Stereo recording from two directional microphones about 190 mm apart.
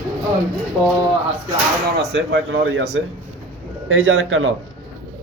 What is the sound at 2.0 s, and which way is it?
Speech, 70° right (ahead or behind).